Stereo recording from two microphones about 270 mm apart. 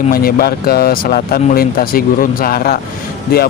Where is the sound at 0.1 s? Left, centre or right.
Left.